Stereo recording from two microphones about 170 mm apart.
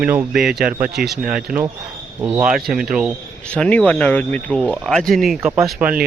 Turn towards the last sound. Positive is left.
turn(degrees=-5)  # may be behind; listen again after turning